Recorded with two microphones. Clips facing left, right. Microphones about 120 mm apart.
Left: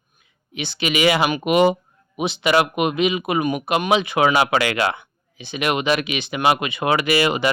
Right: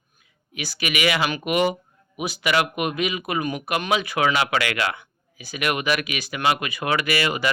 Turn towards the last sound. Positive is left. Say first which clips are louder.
# left 5 dB
turn(degrees=25)  # may be behind; listen again after turning